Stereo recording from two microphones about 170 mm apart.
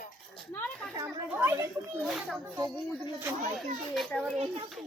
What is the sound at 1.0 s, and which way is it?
Chatter, 10° right (ahead or behind).